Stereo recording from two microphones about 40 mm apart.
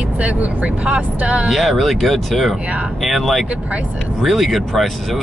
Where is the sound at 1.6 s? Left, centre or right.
Centre.